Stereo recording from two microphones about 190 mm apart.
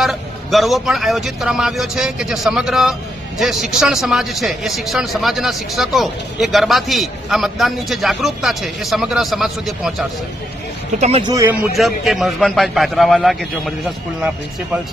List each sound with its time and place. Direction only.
0.0 s speech: centre (ahead or behind)
11.0 s speech: 35° right (ahead or behind)
11.2 s speech: 15° right (ahead or behind)
11.6 s speech: centre (ahead or behind)